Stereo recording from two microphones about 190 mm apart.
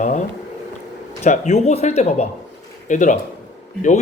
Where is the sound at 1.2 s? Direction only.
35° left (ahead or behind).